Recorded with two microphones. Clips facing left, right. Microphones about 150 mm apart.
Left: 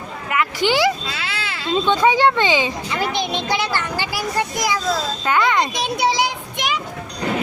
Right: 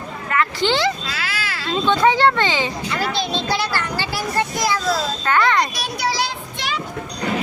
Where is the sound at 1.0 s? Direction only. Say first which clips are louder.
Even; 25° left (ahead or behind).